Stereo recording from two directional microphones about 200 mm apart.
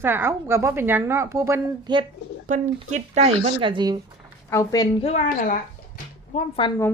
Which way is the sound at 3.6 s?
20° right (ahead or behind).